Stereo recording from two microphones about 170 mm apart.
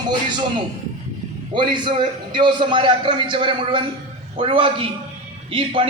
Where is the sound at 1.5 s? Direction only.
30° right (ahead or behind).